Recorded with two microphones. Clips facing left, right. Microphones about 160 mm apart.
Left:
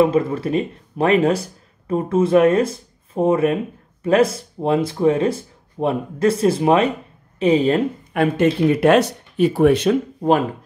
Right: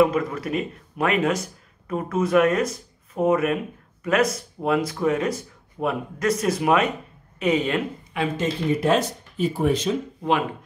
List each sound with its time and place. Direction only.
0.0 s speech: 30° left (ahead or behind)
8.1 s speech: 55° left (ahead or behind)